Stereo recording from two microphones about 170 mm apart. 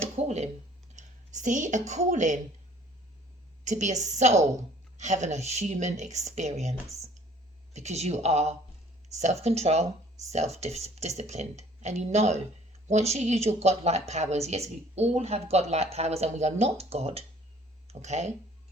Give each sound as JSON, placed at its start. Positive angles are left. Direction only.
{"t": 0.2, "sound": "a sound", "side_deg": -40}
{"t": 0.9, "sound": "speech", "side_deg": -45}
{"t": 3.6, "sound": "a woman's voice", "side_deg": -45}